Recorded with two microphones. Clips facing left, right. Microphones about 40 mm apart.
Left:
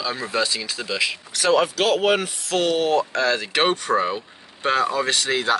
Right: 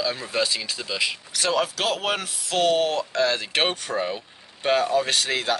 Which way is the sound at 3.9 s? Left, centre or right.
Centre.